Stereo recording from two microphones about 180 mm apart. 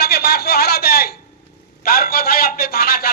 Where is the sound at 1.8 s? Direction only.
55° left (ahead or behind).